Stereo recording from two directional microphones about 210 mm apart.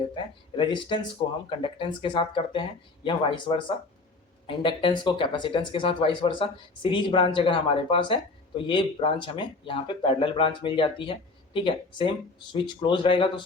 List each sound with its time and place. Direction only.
0.1 s speech: 20° left (ahead or behind)